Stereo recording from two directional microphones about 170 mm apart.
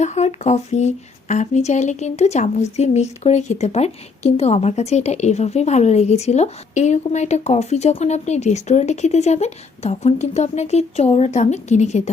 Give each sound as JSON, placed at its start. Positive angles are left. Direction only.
{"t": 0.0, "sound": "speech", "side_deg": 40}